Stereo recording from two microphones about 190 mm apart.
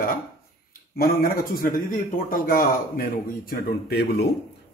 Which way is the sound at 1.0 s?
50° left (ahead or behind).